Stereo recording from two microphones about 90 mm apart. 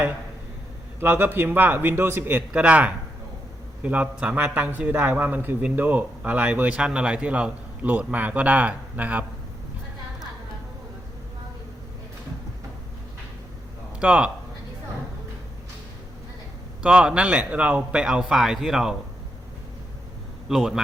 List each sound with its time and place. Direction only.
0.9 s a man's voice: 25° right (ahead or behind)
2.5 s a man's voice: 15° right (ahead or behind)
14.0 s speech: 10° right (ahead or behind)
16.8 s a man's voice: 10° right (ahead or behind)
20.5 s a man's voice: 5° right (ahead or behind)